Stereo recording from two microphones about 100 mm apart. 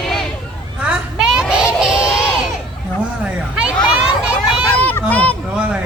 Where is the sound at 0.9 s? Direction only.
5° right (ahead or behind).